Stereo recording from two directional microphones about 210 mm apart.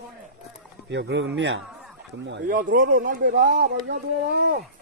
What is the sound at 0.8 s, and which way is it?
Speech, 55° right (ahead or behind).